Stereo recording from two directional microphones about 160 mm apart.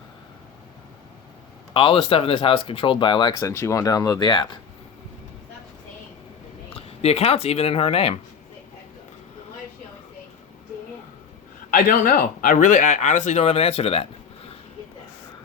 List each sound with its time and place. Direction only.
1.7 s speech: 35° left (ahead or behind)
6.7 s speech: 40° left (ahead or behind)
11.7 s speech: 60° left (ahead or behind); by 14.5 s 40° left (ahead or behind)